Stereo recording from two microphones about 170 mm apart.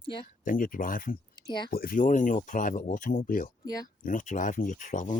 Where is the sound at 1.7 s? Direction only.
60° left (ahead or behind).